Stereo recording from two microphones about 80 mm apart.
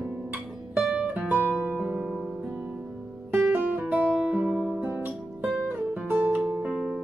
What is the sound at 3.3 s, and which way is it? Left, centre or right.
Guitar, right.